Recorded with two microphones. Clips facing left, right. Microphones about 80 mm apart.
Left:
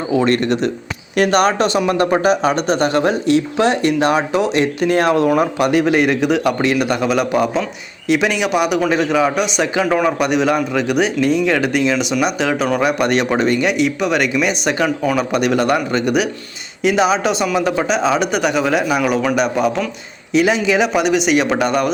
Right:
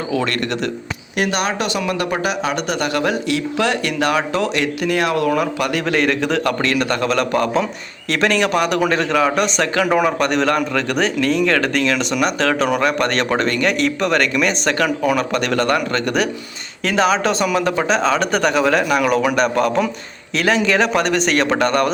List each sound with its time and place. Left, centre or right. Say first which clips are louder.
0.1 s speech: left 7 dB; left
1.2 s a man's voice: left 6 dB; left; by 9.8 s centre
9.8 s speech: even; centre
10.1 s a man's voice: left 1 dB; centre
14.8 s speech: even; centre
15.3 s a man's voice: left 2 dB; centre